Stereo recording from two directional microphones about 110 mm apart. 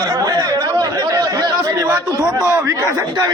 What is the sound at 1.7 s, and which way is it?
Chatter, 30° right (ahead or behind).